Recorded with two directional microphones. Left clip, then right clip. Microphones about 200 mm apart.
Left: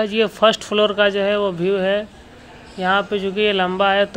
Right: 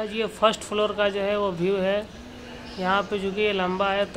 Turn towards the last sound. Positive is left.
turn(degrees=20)  # may be behind; listen again after turning